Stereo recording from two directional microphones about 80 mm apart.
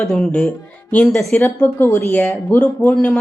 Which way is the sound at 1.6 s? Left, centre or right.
Left.